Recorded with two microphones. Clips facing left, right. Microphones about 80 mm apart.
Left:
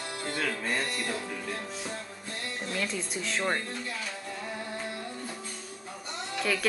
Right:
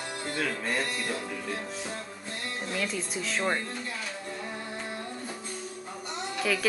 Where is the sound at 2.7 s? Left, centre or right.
Centre.